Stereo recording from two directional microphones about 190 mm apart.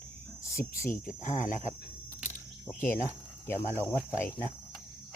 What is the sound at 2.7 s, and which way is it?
Speech, 10° left (ahead or behind).